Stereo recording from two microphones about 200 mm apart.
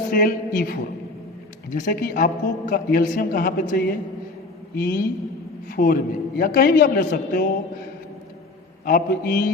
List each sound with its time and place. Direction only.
0.1 s a woman's voice: 45° left (ahead or behind)
8.8 s a woman's voice: 50° left (ahead or behind)